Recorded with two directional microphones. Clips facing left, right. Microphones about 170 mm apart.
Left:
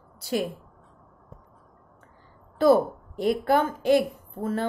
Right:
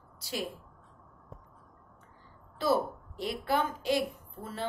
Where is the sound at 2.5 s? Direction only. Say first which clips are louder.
Left 9 dB; 50° left (ahead or behind).